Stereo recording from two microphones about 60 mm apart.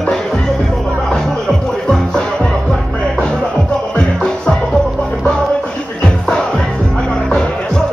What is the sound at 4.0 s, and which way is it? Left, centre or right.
Music, centre.